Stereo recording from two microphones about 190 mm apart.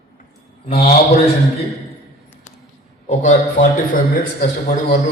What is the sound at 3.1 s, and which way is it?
A man's voice, 40° left (ahead or behind).